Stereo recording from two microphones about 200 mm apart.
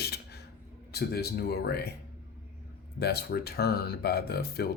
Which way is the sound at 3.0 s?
55° left (ahead or behind).